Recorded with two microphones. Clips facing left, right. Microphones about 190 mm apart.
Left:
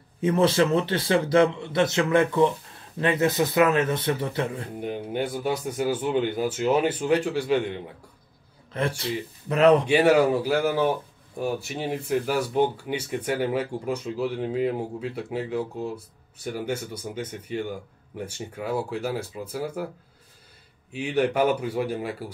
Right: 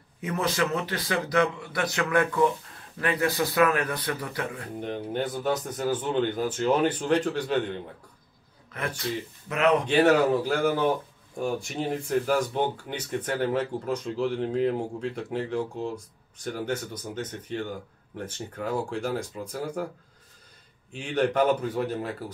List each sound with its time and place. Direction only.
0.2 s a man's voice: 30° left (ahead or behind)
4.7 s speech: 10° left (ahead or behind)
8.7 s a man's voice: 30° left (ahead or behind)
9.8 s speech: 10° left (ahead or behind)
20.9 s speech: 5° left (ahead or behind)